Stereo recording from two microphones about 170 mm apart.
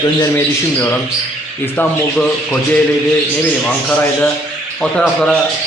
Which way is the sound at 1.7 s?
10° left (ahead or behind).